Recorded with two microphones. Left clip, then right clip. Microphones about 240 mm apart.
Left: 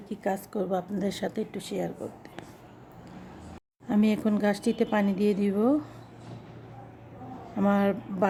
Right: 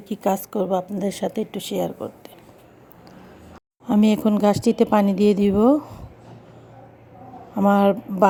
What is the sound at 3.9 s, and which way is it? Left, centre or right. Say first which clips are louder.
A woman's voice: right 7 dB; right.